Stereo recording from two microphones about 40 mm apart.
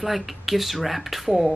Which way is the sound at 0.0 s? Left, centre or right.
Centre.